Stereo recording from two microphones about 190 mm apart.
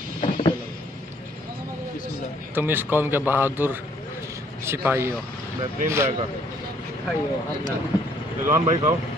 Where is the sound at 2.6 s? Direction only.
10° right (ahead or behind).